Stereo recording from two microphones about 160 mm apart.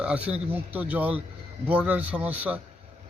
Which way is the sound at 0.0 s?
5° right (ahead or behind).